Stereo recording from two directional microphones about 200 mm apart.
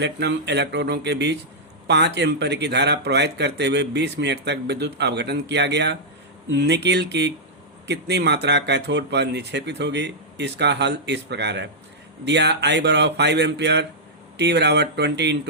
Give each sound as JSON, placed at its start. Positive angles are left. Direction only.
{"t": 0.0, "sound": "speech", "side_deg": -60}